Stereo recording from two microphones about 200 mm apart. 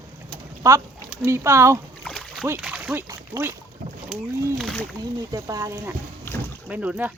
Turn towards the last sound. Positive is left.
turn(degrees=-5)  # may be behind; listen again after turning